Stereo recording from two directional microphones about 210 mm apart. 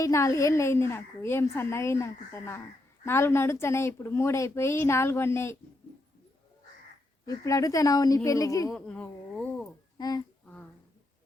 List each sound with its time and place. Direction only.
0.0 s a woman's voice: 15° left (ahead or behind)
7.3 s a woman's voice: 15° left (ahead or behind)
8.7 s speech: 5° left (ahead or behind)
10.0 s a child's voice: 20° left (ahead or behind)